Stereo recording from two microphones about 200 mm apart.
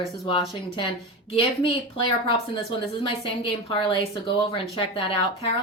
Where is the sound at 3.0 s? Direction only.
25° left (ahead or behind).